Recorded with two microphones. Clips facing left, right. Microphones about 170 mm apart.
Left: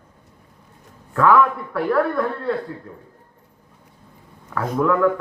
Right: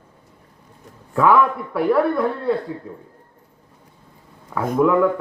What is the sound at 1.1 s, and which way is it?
A man's voice, 10° right (ahead or behind).